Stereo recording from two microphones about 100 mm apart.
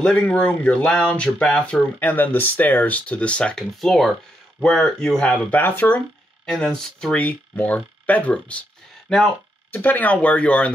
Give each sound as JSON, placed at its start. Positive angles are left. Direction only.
{"t": 0.0, "sound": "speech", "side_deg": 10}
{"t": 5.6, "sound": "speech", "side_deg": 20}
{"t": 6.4, "sound": "speech", "side_deg": 5}
{"t": 9.7, "sound": "speech", "side_deg": 15}